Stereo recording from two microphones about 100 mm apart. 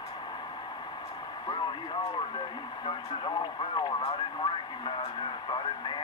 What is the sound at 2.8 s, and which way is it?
Speech, 50° left (ahead or behind).